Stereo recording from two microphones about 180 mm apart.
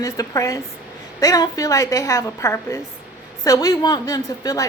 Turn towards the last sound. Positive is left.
turn(degrees=20)  # may be behind; listen again after turning